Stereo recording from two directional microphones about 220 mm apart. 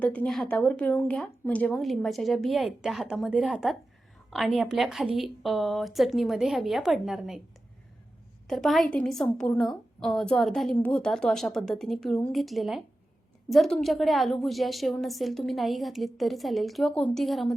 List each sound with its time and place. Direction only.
0.0 s a woman's voice: 5° left (ahead or behind)
8.4 s a woman's voice: centre (ahead or behind)